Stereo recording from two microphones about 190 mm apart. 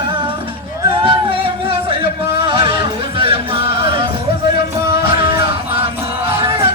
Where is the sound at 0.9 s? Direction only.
25° right (ahead or behind).